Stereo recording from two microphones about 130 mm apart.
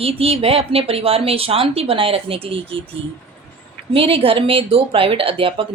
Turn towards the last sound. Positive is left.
turn(degrees=-45)  # may be behind; listen again after turning